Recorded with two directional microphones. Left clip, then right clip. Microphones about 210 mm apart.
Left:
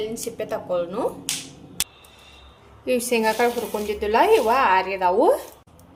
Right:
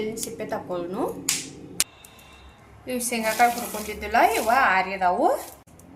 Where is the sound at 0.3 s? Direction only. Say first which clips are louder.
Left 7 dB; 55° left (ahead or behind).